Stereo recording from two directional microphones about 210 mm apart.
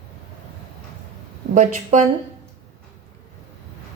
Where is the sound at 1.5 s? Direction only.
35° right (ahead or behind).